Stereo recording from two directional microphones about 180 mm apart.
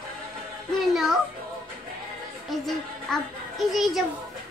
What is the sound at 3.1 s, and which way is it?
Speech, 5° left (ahead or behind).